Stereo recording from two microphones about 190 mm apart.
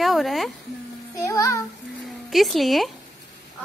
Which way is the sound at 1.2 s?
15° left (ahead or behind).